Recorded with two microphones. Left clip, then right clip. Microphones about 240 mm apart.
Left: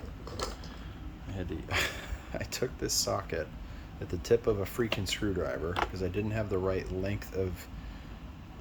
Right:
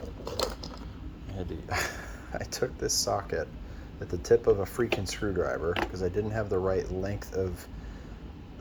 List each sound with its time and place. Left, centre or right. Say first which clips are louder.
1.7 s speech: even; left